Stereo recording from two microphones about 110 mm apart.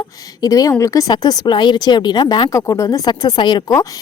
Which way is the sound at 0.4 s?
30° left (ahead or behind).